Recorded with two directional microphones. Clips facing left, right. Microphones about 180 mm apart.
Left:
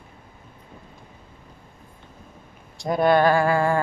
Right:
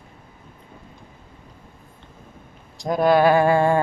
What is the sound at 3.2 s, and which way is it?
Speech, 20° right (ahead or behind).